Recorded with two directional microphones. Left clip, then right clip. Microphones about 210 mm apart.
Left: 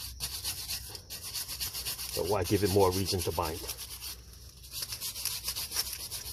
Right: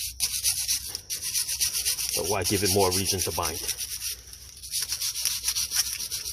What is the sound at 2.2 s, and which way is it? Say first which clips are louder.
Rub: right 1 dB; 30° right (ahead or behind).